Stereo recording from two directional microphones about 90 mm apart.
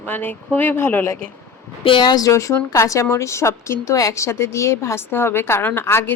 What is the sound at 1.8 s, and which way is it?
Speech, 65° left (ahead or behind).